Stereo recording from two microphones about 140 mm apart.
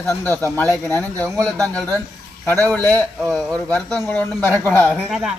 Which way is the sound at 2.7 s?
10° left (ahead or behind).